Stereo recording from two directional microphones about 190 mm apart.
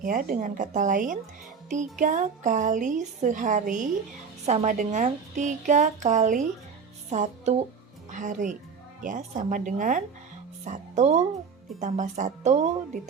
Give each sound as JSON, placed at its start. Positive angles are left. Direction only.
{"t": 0.0, "sound": "a woman's voice", "side_deg": -45}